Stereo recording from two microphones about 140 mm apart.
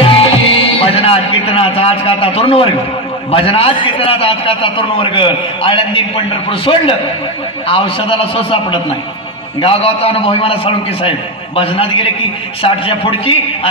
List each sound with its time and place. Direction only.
0.0 s music: 40° left (ahead or behind)
3.3 s a man's voice: 40° left (ahead or behind)
9.6 s a man's voice: 40° left (ahead or behind)